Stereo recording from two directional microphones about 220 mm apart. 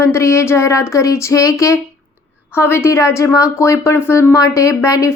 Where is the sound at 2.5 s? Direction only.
10° left (ahead or behind).